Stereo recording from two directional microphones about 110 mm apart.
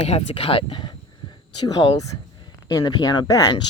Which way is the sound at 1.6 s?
40° left (ahead or behind).